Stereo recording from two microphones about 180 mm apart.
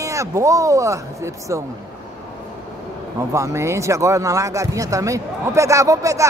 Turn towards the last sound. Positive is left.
turn(degrees=-15)  # may be behind; listen again after turning